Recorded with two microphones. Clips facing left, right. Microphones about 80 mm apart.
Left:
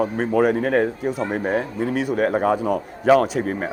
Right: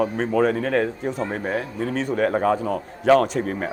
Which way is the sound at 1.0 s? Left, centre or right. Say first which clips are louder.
Left 3 dB; centre.